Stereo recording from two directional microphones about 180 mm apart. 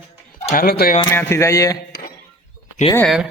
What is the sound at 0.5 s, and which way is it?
Speech, 55° left (ahead or behind).